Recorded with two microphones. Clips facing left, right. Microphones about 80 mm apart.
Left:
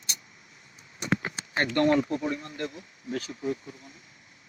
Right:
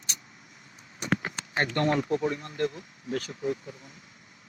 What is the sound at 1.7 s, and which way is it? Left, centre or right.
Speech, right.